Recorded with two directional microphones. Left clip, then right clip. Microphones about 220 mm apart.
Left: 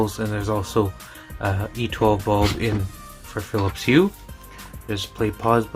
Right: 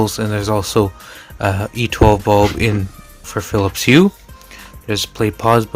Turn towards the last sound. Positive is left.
turn(degrees=-45)  # may be behind; listen again after turning